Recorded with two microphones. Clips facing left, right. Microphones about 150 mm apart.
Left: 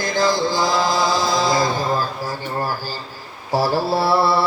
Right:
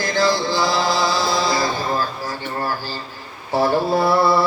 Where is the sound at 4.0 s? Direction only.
30° left (ahead or behind).